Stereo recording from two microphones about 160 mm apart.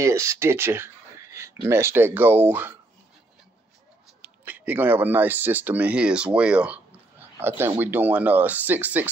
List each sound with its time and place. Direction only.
0.0 s speech: 15° right (ahead or behind)
4.2 s speech: 10° right (ahead or behind)